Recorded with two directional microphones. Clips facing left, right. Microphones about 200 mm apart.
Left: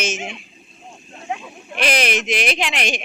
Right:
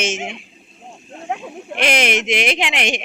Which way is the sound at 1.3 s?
60° right (ahead or behind).